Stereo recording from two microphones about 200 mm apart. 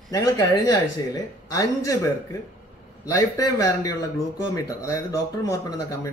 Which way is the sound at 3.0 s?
15° left (ahead or behind).